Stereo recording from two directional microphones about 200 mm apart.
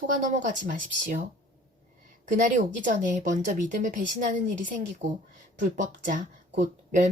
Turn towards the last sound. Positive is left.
turn(degrees=-40)  # may be behind; listen again after turning